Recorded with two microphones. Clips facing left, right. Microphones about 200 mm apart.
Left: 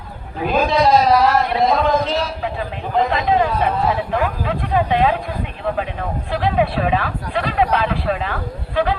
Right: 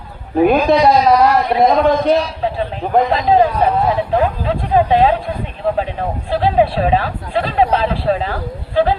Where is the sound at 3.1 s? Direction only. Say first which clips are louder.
Right 4 dB; 35° right (ahead or behind).